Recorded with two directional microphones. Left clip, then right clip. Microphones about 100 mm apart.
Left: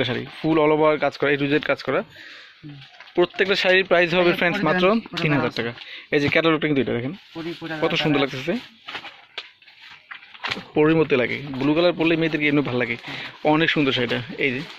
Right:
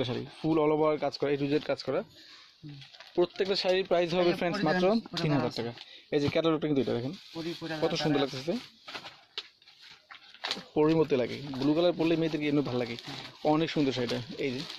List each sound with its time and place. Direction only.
0.0 s speech: 5° right (ahead or behind)
3.2 s speech: 5° right (ahead or behind)
4.4 s speech: 20° right (ahead or behind)
7.1 s speech: 10° right (ahead or behind)
10.8 s speech: 15° right (ahead or behind)